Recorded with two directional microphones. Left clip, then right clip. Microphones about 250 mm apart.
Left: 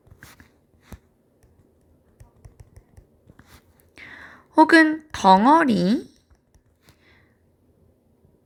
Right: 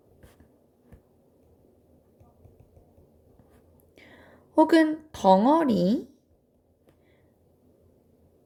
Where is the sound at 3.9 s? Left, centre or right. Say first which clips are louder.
Left 11 dB; left.